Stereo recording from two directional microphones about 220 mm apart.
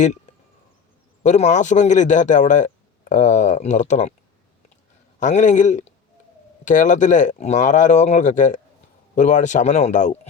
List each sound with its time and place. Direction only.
1.2 s speech: 30° left (ahead or behind)
5.2 s speech: 35° left (ahead or behind)